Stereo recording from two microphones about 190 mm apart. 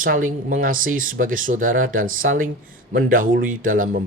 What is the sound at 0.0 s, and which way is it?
Speech, 45° right (ahead or behind).